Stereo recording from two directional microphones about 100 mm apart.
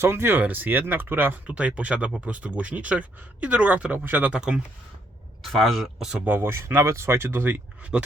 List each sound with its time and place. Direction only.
0.0 s speech: 25° right (ahead or behind)
5.4 s speech: centre (ahead or behind)
6.2 s speech: 20° right (ahead or behind)